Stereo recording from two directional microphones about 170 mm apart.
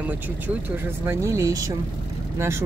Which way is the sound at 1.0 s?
15° right (ahead or behind).